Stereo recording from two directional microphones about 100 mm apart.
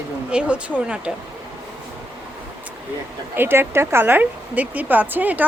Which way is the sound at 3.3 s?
20° right (ahead or behind).